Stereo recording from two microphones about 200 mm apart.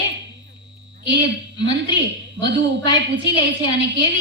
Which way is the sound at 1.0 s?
20° left (ahead or behind).